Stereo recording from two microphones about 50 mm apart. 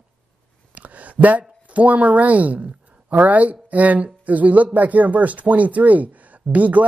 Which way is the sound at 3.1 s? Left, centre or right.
Right.